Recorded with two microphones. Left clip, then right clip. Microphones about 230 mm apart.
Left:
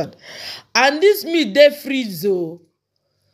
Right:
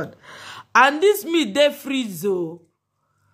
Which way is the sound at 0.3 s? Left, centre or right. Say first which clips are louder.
Right 5 dB; centre.